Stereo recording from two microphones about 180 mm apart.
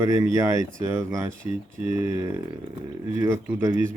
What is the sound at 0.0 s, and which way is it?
Speech, 20° right (ahead or behind).